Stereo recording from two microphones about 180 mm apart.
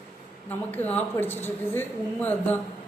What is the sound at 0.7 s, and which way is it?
Speech, 10° left (ahead or behind).